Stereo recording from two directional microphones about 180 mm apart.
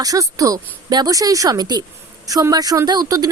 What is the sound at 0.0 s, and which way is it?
A woman's voice, 20° right (ahead or behind).